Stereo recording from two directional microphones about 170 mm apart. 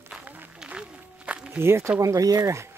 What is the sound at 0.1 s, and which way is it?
Walk, 5° right (ahead or behind).